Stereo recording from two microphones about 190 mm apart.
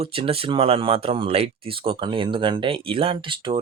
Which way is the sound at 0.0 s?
30° right (ahead or behind).